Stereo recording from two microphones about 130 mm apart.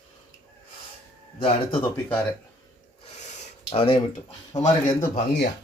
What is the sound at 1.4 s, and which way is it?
Speech, 45° left (ahead or behind).